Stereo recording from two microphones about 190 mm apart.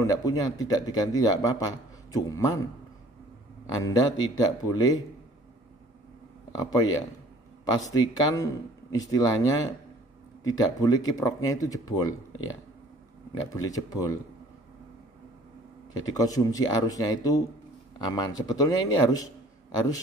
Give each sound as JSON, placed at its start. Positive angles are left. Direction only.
{"t": 0.0, "sound": "speech", "side_deg": 20}
{"t": 6.5, "sound": "speech", "side_deg": 20}
{"t": 13.4, "sound": "speech", "side_deg": 20}
{"t": 16.1, "sound": "speech", "side_deg": 20}